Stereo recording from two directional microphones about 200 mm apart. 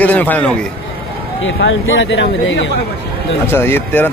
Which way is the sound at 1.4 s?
70° left (ahead or behind).